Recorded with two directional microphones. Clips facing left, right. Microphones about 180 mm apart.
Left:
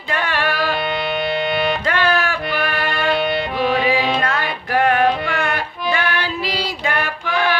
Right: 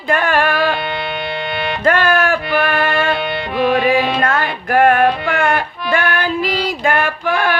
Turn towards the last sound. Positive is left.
turn(degrees=-50)  # may be behind; listen again after turning